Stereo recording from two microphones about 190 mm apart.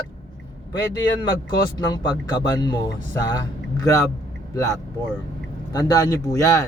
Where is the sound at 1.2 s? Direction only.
20° left (ahead or behind).